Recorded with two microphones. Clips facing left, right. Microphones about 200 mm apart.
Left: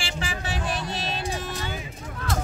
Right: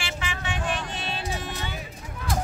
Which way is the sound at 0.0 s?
35° left (ahead or behind).